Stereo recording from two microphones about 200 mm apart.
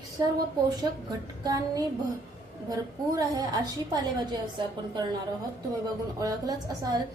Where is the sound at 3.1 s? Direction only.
20° right (ahead or behind).